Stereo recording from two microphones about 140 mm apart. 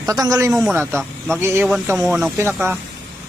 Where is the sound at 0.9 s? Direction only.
5° left (ahead or behind).